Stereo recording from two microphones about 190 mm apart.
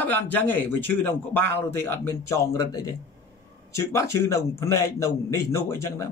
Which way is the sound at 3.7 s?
15° left (ahead or behind).